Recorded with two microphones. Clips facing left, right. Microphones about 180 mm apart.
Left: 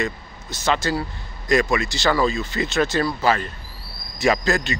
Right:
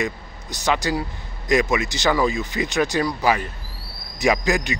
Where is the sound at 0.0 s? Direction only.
15° right (ahead or behind).